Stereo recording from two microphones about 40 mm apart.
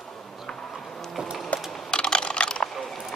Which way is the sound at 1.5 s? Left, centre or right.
Left.